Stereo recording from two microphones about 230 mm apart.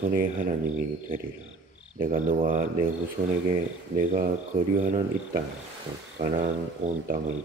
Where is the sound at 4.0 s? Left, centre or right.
Right.